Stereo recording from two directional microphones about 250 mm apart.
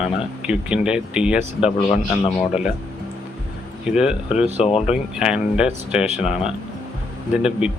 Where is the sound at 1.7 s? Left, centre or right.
Left.